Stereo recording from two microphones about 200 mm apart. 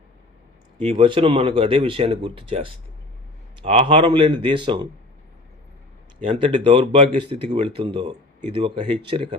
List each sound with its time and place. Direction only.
0.8 s speech: 25° right (ahead or behind)
6.2 s speech: 25° right (ahead or behind)